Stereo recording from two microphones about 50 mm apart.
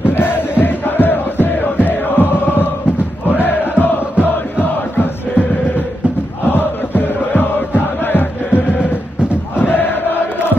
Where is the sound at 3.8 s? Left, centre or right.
Left.